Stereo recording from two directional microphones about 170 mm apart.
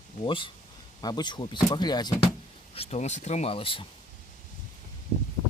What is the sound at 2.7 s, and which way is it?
Speech, 35° left (ahead or behind).